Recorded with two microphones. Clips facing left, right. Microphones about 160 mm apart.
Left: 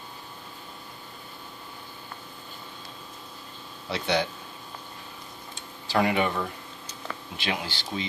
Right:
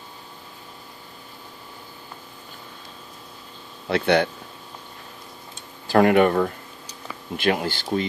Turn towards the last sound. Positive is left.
turn(degrees=-50)  # may be behind; listen again after turning